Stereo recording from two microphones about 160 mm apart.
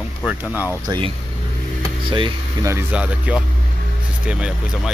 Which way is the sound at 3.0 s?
5° right (ahead or behind).